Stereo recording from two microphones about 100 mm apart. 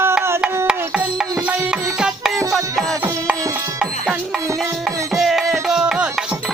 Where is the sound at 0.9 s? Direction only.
10° right (ahead or behind).